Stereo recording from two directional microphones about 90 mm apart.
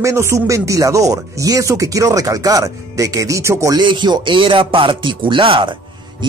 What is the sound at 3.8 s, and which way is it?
Speech, 60° right (ahead or behind).